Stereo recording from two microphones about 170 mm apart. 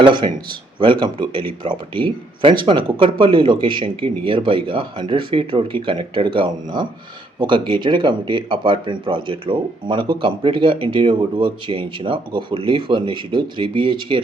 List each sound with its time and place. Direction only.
0.0 s speech: 30° right (ahead or behind)